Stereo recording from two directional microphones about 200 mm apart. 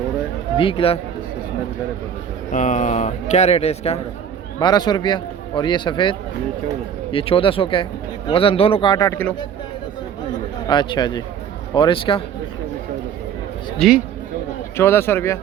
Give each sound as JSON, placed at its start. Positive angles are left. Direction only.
{"t": 0.5, "sound": "a man's voice", "side_deg": 25}
{"t": 2.5, "sound": "a man's voice", "side_deg": 40}
{"t": 4.6, "sound": "a man's voice", "side_deg": 20}
{"t": 10.7, "sound": "a man's voice", "side_deg": 20}
{"t": 13.7, "sound": "a man's voice", "side_deg": 0}
{"t": 14.8, "sound": "speech", "side_deg": 10}